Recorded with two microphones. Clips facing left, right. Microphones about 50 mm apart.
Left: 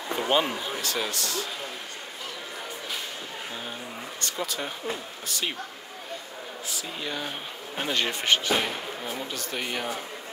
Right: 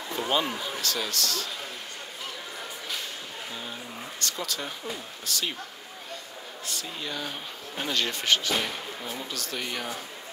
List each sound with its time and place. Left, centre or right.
0.1 s a man's voice: left
4.2 s a man's voice: centre
6.7 s speech: centre